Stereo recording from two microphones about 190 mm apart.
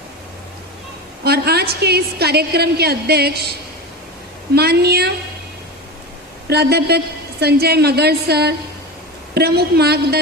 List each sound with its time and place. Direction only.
1.2 s a woman's voice: 55° right (ahead or behind)
4.5 s a woman's voice: 60° right (ahead or behind)
6.5 s a woman's voice: 60° right (ahead or behind)